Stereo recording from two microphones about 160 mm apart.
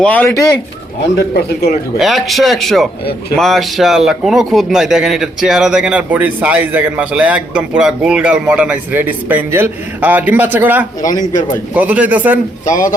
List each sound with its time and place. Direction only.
0.0 s speech: 10° left (ahead or behind)
1.3 s speech: 85° left
2.0 s a man's voice: centre (ahead or behind)